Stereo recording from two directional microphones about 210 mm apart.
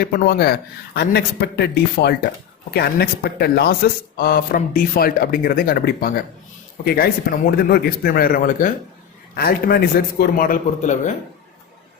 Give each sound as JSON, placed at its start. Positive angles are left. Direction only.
{"t": 0.0, "sound": "speech", "side_deg": 45}